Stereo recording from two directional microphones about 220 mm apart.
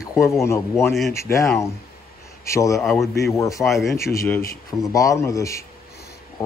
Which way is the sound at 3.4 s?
15° left (ahead or behind).